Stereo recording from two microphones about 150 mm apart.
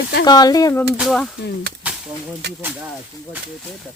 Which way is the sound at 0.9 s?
Centre (ahead or behind).